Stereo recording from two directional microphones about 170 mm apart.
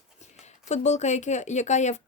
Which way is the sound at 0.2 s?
40° left (ahead or behind).